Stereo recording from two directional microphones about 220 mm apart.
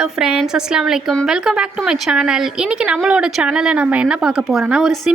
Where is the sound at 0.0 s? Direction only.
Centre (ahead or behind).